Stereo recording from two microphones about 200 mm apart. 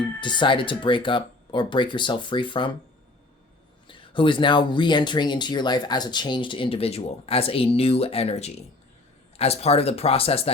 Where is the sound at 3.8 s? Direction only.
25° left (ahead or behind).